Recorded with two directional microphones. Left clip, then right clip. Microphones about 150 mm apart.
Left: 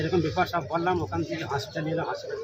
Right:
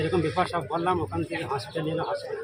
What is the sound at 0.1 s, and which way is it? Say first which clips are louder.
Speech: even; centre (ahead or behind).